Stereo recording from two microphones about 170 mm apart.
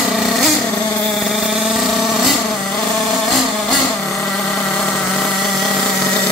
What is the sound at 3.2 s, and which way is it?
Vehicle, centre (ahead or behind).